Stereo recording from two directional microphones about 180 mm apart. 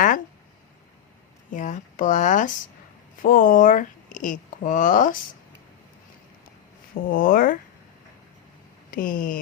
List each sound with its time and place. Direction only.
1.5 s speech: 45° left (ahead or behind)
7.1 s speech: 50° left (ahead or behind)
8.9 s speech: 50° left (ahead or behind)